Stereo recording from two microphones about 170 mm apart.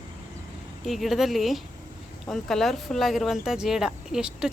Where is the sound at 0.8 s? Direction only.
Centre (ahead or behind).